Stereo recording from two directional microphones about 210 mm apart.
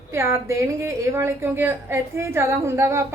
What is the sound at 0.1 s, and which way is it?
A woman's voice, 15° right (ahead or behind).